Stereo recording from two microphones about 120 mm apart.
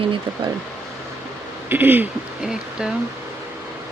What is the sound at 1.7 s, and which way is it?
Speech, 15° right (ahead or behind).